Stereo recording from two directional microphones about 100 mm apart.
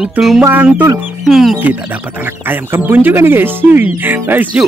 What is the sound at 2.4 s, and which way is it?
Speech, 20° right (ahead or behind).